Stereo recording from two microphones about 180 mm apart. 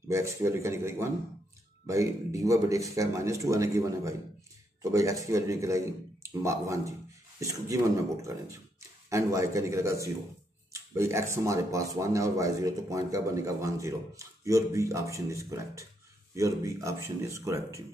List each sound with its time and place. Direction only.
0.1 s speech: 15° right (ahead or behind)